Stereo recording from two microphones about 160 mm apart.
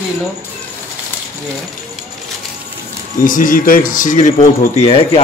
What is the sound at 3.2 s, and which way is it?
Speech, 60° left (ahead or behind).